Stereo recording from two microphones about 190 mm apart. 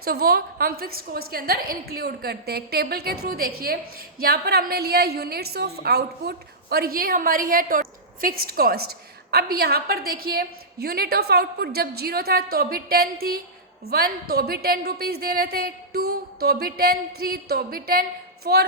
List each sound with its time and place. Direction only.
0.0 s a woman's voice: 55° right (ahead or behind)